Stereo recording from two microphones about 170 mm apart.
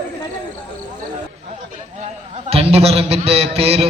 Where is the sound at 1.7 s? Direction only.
40° right (ahead or behind).